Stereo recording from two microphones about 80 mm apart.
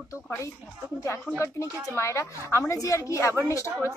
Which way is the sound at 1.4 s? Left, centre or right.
Left.